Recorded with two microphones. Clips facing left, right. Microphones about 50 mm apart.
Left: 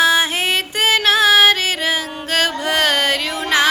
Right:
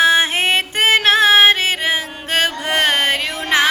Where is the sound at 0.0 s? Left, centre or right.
Right.